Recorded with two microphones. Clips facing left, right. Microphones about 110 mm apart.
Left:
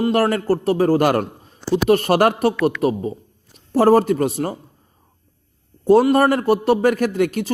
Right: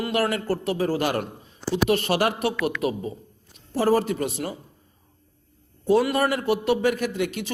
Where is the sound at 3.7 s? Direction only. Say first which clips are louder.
Left 7 dB; 45° left (ahead or behind).